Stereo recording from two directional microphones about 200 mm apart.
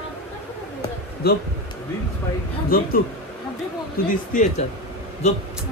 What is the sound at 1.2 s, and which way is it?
Speech, 50° left (ahead or behind).